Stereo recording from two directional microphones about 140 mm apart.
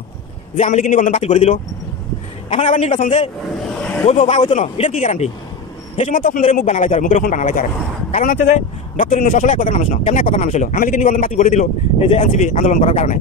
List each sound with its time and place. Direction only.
0.6 s a man's voice: 65° left (ahead or behind)
1.2 s a man's voice: 50° left (ahead or behind)
2.5 s a man's voice: 55° left (ahead or behind)
6.0 s a man's voice: 75° left (ahead or behind)
6.6 s a man's voice: 60° left (ahead or behind); by 7.6 s 75° left (ahead or behind)
8.1 s speech: 65° left (ahead or behind)